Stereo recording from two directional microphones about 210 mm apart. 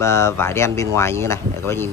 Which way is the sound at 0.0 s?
15° left (ahead or behind).